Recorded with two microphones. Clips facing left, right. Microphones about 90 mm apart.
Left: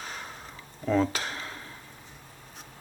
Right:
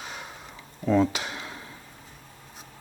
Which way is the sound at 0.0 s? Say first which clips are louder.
Even; 40° left (ahead or behind).